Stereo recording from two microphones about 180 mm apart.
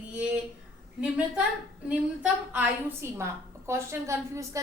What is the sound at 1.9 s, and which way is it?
A woman's voice, 10° right (ahead or behind).